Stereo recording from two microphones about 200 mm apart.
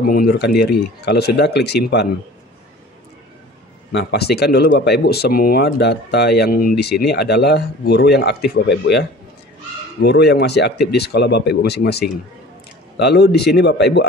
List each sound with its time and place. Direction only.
0.0 s speech: 45° left (ahead or behind)
3.9 s speech: 55° left (ahead or behind)